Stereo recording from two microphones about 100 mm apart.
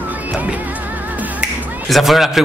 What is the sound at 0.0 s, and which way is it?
Music, 15° right (ahead or behind).